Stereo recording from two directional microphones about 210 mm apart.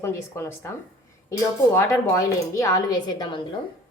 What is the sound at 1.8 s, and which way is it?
A woman's voice, 15° left (ahead or behind).